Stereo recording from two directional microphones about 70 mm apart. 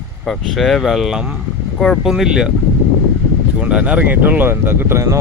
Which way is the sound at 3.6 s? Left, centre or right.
Centre.